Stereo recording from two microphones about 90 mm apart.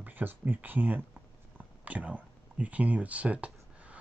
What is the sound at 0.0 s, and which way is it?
Speech, 20° right (ahead or behind).